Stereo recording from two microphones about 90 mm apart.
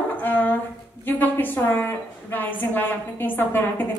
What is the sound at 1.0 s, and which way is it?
A woman's voice, 20° left (ahead or behind).